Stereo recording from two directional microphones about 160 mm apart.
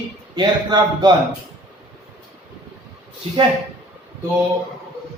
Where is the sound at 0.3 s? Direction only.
25° right (ahead or behind).